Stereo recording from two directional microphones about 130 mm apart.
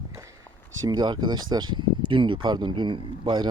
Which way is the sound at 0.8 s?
35° right (ahead or behind).